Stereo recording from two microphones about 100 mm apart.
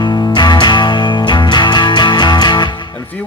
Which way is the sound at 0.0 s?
50° left (ahead or behind).